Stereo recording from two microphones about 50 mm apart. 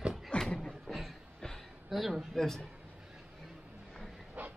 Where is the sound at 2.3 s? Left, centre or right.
Centre.